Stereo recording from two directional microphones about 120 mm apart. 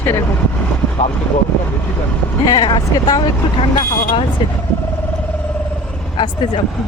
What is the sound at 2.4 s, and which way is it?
Speech, 35° left (ahead or behind).